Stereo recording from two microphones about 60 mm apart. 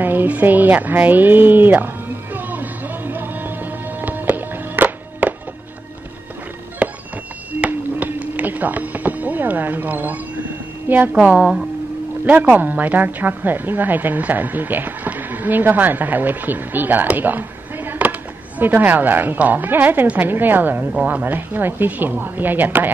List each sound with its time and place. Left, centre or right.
0.0 s a woman's voice: right
2.3 s music: right
6.8 s music: centre
7.6 s a sound: right
11.1 s a woman's voice: centre
12.3 s a woman's voice: right